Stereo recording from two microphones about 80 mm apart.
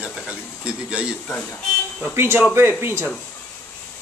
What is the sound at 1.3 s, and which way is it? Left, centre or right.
Speech, left.